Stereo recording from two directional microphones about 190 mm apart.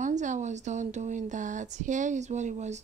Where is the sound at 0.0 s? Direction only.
40° right (ahead or behind).